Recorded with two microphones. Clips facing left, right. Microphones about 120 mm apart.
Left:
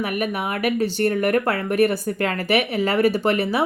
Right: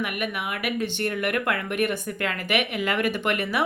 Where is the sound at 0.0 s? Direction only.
35° left (ahead or behind).